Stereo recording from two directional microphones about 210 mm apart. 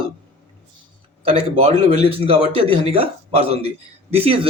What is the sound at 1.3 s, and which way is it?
A man's voice, 30° right (ahead or behind).